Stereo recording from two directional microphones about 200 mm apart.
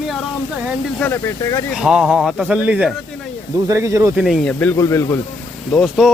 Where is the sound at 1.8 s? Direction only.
5° right (ahead or behind).